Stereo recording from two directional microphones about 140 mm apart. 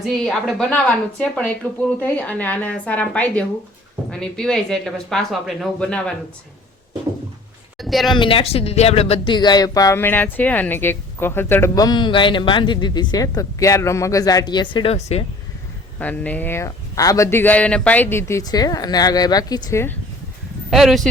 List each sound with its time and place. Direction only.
0.0 s a woman's voice: centre (ahead or behind)
7.8 s a sound: centre (ahead or behind)
8.1 s a man's voice: 40° left (ahead or behind); by 11.7 s 15° left (ahead or behind)
11.7 s a man's voice: 30° left (ahead or behind)
16.0 s a man's voice: 10° left (ahead or behind); by 19.8 s 30° left (ahead or behind)
20.7 s speech: centre (ahead or behind)